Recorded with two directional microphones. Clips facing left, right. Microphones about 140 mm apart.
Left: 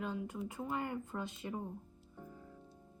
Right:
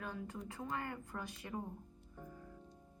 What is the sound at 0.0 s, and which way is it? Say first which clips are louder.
A woman's voice: left 5 dB; 20° left (ahead or behind).